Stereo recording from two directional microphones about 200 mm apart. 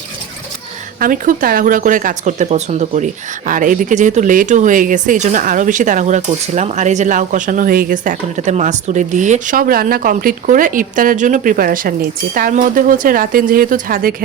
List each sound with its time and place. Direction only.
0.9 s speech: 45° right (ahead or behind)